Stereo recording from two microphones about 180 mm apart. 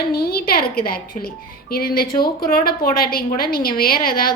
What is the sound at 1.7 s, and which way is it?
A woman's voice, 55° left (ahead or behind).